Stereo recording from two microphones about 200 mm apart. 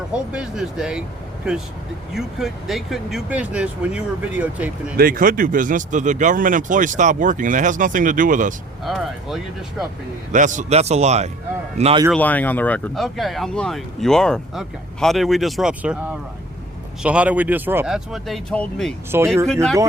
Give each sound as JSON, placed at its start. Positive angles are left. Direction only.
{"t": 0.1, "sound": "speech", "side_deg": -5}
{"t": 4.9, "sound": "speech", "side_deg": -45}
{"t": 8.8, "sound": "speech", "side_deg": 0}
{"t": 10.3, "sound": "a man's voice", "side_deg": -40}
{"t": 12.1, "sound": "speech", "side_deg": 10}